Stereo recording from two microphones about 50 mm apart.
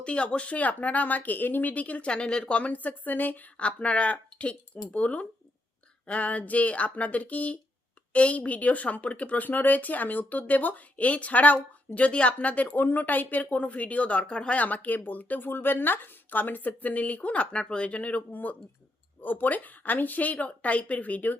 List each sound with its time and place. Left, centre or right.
0.0 s speech: left
3.6 s speech: left